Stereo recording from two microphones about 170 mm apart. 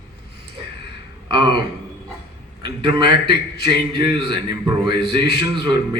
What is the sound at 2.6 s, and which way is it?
A man's voice, 25° right (ahead or behind).